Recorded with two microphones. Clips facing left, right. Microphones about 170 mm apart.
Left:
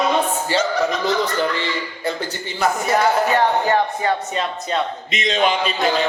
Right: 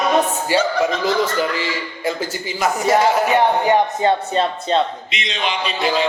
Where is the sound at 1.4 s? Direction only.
10° right (ahead or behind).